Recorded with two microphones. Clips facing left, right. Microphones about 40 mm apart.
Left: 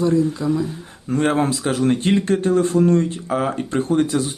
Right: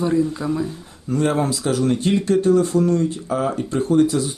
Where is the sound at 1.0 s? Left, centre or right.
Left.